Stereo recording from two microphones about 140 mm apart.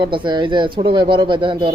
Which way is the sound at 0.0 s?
35° right (ahead or behind).